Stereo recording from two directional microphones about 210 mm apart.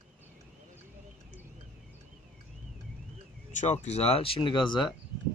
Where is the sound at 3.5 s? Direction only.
35° left (ahead or behind).